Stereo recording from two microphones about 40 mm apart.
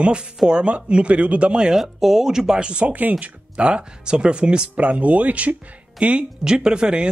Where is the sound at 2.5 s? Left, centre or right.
Right.